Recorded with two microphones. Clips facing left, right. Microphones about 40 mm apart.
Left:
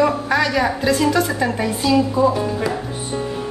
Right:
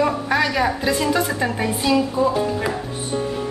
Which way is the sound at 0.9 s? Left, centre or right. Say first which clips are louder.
Left 3 dB; centre.